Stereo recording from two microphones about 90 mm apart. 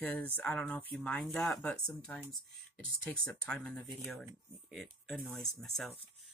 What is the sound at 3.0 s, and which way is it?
Speech, 15° left (ahead or behind).